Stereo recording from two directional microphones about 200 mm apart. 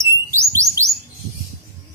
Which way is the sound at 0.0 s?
15° right (ahead or behind).